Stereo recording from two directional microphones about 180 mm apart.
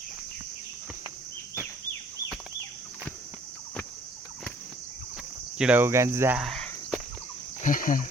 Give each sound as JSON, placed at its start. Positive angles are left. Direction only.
{"t": 5.5, "sound": "cricket", "side_deg": -10}
{"t": 6.4, "sound": "cricket", "side_deg": 0}
{"t": 7.6, "sound": "speech", "side_deg": 50}